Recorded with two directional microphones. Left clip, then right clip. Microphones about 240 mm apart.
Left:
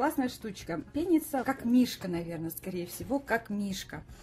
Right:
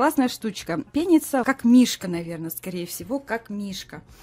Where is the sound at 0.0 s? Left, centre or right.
Right.